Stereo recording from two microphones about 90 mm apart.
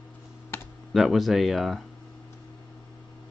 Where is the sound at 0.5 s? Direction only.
30° left (ahead or behind).